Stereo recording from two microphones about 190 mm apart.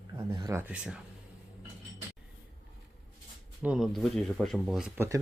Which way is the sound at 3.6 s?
5° right (ahead or behind).